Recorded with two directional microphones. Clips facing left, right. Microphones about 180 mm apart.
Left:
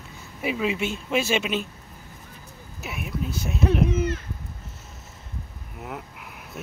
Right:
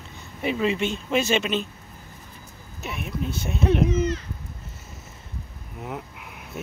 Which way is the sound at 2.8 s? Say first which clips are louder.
Right 1 dB; 5° left (ahead or behind).